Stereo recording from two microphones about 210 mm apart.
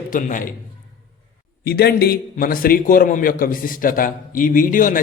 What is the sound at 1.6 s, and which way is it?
A man's voice, 50° left (ahead or behind).